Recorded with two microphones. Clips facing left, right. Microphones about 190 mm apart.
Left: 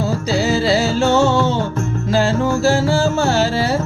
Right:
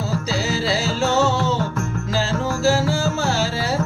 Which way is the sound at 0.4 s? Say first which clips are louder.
Left 8 dB; 55° left (ahead or behind).